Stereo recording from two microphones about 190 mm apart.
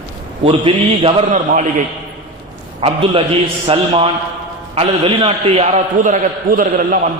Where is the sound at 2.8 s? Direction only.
30° right (ahead or behind); by 7.0 s 45° right (ahead or behind).